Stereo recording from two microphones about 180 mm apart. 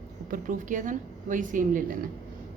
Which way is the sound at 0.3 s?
45° right (ahead or behind).